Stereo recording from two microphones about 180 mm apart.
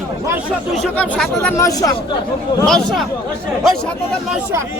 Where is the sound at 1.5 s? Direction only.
20° left (ahead or behind).